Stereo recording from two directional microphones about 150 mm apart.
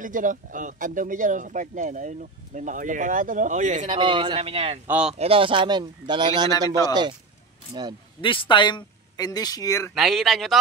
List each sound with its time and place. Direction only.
0.0 s speech: 60° right (ahead or behind)
3.9 s speech: 35° right (ahead or behind)
4.8 s speech: 10° right (ahead or behind)
5.2 s speech: 35° right (ahead or behind)
8.2 s speech: 35° left (ahead or behind)
9.9 s speech: centre (ahead or behind)